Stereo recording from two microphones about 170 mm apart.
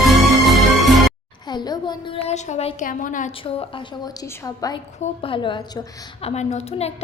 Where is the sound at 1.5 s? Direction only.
25° left (ahead or behind); by 2.8 s 40° left (ahead or behind).